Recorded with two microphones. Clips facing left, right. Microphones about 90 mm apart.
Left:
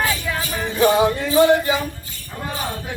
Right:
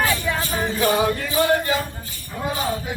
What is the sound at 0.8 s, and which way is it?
Music, 20° left (ahead or behind).